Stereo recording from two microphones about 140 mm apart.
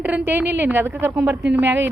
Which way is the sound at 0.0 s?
10° right (ahead or behind).